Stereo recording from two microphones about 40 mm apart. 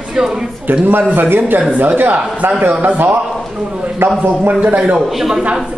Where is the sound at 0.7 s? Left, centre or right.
Right.